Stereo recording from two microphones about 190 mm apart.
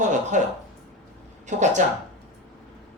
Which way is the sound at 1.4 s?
40° right (ahead or behind).